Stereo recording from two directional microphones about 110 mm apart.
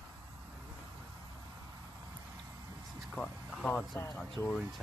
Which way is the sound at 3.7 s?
20° left (ahead or behind).